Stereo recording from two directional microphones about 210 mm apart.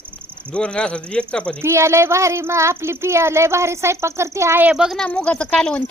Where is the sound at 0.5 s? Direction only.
5° left (ahead or behind).